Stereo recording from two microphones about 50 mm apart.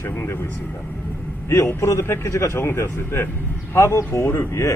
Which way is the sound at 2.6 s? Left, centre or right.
Left.